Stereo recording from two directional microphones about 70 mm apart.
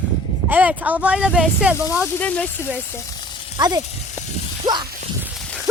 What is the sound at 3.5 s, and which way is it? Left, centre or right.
Speech, right.